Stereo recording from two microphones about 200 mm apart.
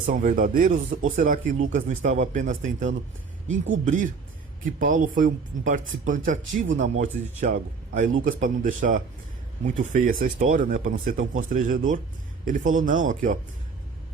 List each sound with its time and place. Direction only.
0.0 s speech: 35° right (ahead or behind)